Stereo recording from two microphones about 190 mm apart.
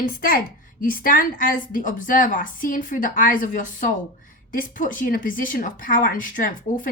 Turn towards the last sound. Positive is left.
turn(degrees=45)  # may be behind; listen again after turning